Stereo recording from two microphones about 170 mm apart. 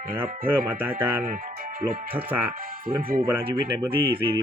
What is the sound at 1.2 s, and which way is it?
Speech, 60° right (ahead or behind).